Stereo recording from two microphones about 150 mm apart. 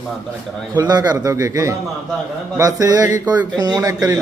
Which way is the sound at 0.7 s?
25° right (ahead or behind).